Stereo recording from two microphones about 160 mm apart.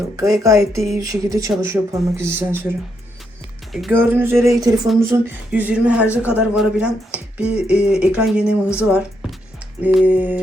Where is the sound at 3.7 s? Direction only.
Centre (ahead or behind).